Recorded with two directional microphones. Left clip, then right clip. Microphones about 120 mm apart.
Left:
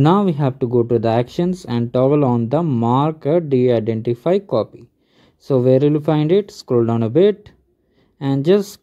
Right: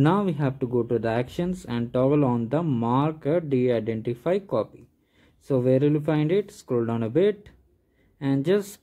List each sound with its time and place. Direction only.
0.0 s speech: 35° left (ahead or behind)